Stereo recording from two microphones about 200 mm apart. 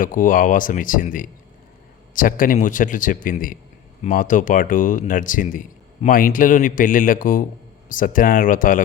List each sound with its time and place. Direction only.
0.0 s a man's voice: 40° left (ahead or behind)